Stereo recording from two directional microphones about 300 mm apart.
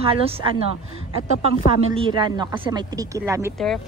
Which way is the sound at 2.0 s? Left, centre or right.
Centre.